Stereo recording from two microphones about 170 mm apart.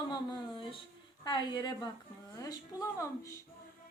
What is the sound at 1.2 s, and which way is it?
Speech, 25° left (ahead or behind).